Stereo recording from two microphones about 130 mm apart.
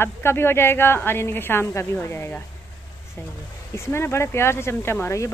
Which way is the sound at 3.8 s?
20° left (ahead or behind).